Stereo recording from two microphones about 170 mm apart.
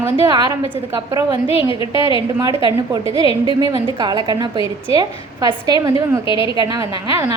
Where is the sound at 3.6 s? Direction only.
25° right (ahead or behind).